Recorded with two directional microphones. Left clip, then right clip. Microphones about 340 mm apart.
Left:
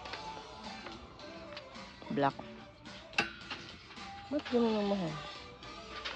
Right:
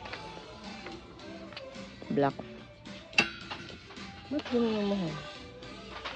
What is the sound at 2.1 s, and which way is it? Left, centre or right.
Speech, centre.